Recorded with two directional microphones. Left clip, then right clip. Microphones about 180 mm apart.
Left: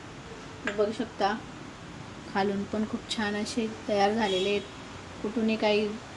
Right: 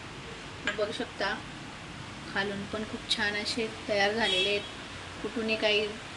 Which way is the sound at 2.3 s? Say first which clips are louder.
Left 4 dB; 40° left (ahead or behind).